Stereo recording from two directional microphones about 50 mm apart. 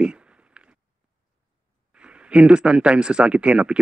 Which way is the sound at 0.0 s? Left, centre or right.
Right.